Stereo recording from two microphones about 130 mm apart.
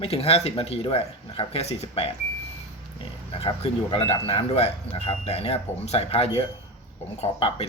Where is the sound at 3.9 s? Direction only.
50° left (ahead or behind).